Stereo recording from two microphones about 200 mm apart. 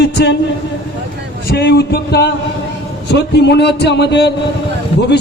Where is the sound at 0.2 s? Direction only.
55° left (ahead or behind).